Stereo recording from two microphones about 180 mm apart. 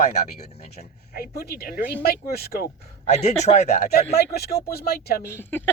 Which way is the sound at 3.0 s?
40° left (ahead or behind).